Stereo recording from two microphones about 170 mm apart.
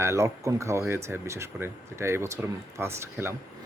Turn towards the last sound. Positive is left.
turn(degrees=-15)  # may be behind; listen again after turning